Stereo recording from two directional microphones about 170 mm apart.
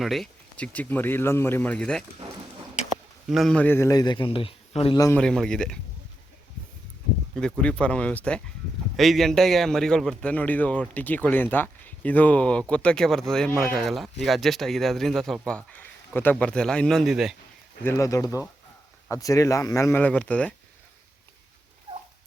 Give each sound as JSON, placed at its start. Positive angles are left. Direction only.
{"t": 0.0, "sound": "speech", "side_deg": 0}
{"t": 3.2, "sound": "a man's voice", "side_deg": 0}
{"t": 5.1, "sound": "a man's voice", "side_deg": 5}
{"t": 7.3, "sound": "a man's voice", "side_deg": 5}
{"t": 17.8, "sound": "a man's voice", "side_deg": 15}